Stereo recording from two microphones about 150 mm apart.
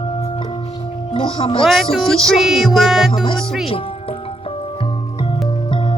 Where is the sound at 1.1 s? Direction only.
40° left (ahead or behind).